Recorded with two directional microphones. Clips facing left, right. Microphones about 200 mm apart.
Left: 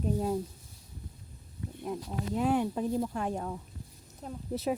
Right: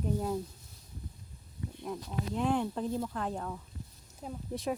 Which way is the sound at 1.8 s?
10° left (ahead or behind).